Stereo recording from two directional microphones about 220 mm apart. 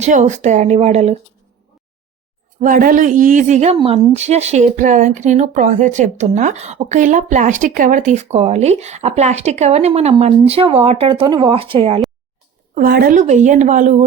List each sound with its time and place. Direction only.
0.0 s a woman's voice: 30° right (ahead or behind)
2.6 s a woman's voice: 40° right (ahead or behind)
12.7 s a woman's voice: 40° right (ahead or behind)